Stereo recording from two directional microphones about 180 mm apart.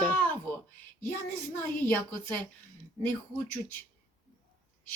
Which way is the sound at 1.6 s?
10° left (ahead or behind).